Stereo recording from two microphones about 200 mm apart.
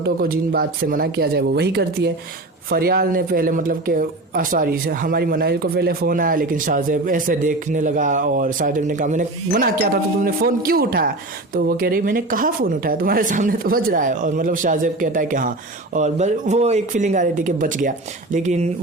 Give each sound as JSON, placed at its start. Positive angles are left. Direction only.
{"t": 0.0, "sound": "speech", "side_deg": -50}